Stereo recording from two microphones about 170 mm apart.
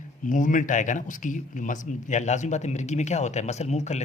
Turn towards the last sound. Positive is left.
turn(degrees=40)  # may be behind; listen again after turning